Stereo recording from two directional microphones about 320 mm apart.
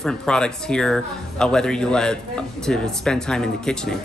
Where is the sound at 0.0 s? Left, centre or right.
Centre.